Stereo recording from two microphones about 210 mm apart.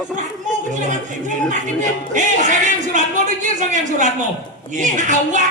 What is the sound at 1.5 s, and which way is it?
Speech, 35° right (ahead or behind).